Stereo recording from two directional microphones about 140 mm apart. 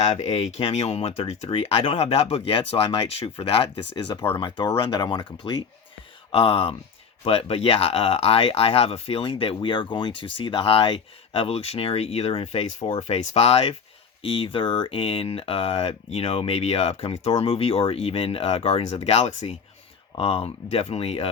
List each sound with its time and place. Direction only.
0.0 s speech: 45° left (ahead or behind)